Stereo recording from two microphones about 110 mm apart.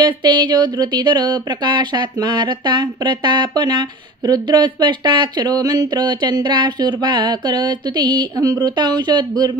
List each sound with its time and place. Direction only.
0.0 s speech: 45° right (ahead or behind)